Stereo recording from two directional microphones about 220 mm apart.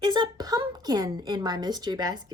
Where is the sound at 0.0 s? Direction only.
20° right (ahead or behind).